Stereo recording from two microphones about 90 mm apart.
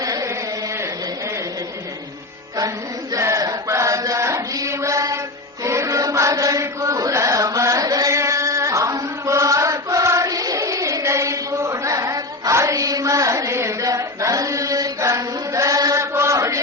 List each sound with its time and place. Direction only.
0.0 s carnatic music: 40° right (ahead or behind)
2.6 s chant: 40° right (ahead or behind)